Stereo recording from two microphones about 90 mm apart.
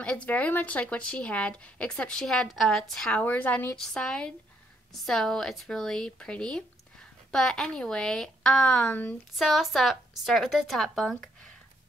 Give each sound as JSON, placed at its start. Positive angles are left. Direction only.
{"t": 0.0, "sound": "speech", "side_deg": 15}
{"t": 3.1, "sound": "speech", "side_deg": 15}
{"t": 3.7, "sound": "speech", "side_deg": 5}
{"t": 9.3, "sound": "speech", "side_deg": 0}